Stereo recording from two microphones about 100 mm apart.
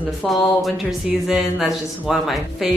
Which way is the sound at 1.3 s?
5° right (ahead or behind).